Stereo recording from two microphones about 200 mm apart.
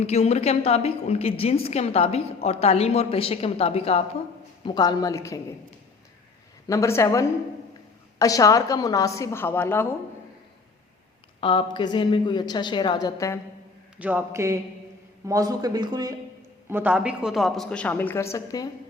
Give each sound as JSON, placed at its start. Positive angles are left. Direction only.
{"t": 0.0, "sound": "a woman's voice", "side_deg": 30}
{"t": 6.7, "sound": "a woman's voice", "side_deg": 15}
{"t": 11.3, "sound": "a woman's voice", "side_deg": 25}
{"t": 14.0, "sound": "speech", "side_deg": -10}
{"t": 16.6, "sound": "a woman's voice", "side_deg": -10}